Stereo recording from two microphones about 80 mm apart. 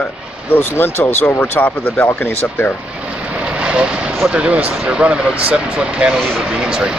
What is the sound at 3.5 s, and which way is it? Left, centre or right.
Vehicle, centre.